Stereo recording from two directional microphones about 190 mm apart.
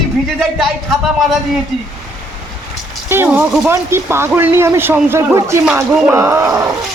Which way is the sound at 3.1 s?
10° right (ahead or behind).